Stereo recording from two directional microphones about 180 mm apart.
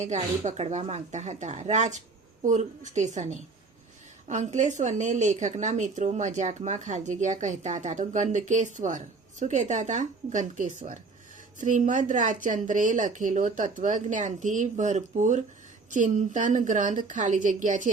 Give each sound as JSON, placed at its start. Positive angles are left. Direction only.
{"t": 0.0, "sound": "a woman's voice", "side_deg": -40}